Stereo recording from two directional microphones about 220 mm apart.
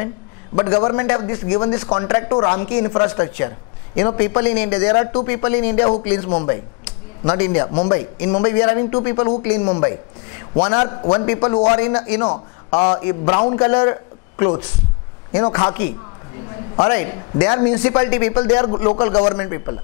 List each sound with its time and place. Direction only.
0.6 s a man's voice: 25° left (ahead or behind)
16.7 s a man's voice: 20° left (ahead or behind)